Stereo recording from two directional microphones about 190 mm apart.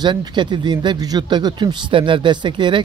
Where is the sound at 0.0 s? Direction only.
25° right (ahead or behind).